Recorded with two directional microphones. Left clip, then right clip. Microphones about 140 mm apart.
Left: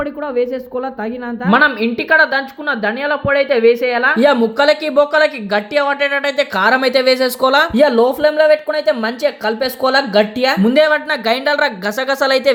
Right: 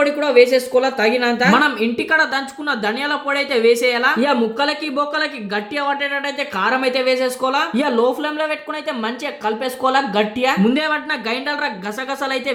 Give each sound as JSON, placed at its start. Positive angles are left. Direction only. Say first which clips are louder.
{"t": 0.0, "sound": "a woman's voice", "louder": "right 5 dB", "side_deg": 15}
{"t": 4.2, "sound": "speech", "louder": "left 5 dB", "side_deg": 40}
{"t": 7.8, "sound": "speech", "louder": "left 6 dB", "side_deg": 30}